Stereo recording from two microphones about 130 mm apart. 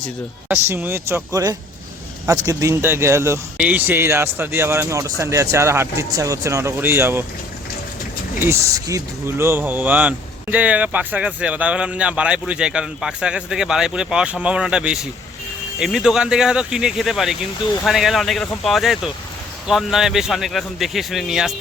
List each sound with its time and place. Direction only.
0.4 s speech: 15° right (ahead or behind)
8.4 s speech: 20° right (ahead or behind); by 21.5 s 5° right (ahead or behind)